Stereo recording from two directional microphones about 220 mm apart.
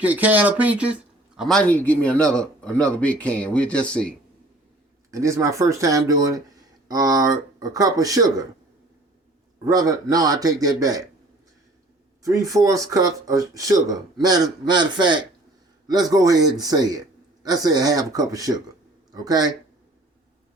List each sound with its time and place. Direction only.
0.0 s speech: 5° right (ahead or behind)
5.1 s speech: 15° right (ahead or behind)
9.6 s speech: 15° right (ahead or behind)
12.2 s speech: 15° right (ahead or behind)